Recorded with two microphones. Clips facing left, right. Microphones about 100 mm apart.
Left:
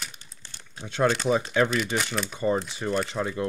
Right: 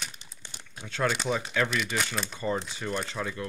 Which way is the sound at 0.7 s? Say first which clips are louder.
Left 5 dB; 20° left (ahead or behind).